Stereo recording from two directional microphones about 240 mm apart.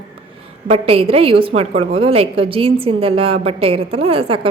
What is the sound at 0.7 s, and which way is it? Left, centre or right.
A woman's voice, right.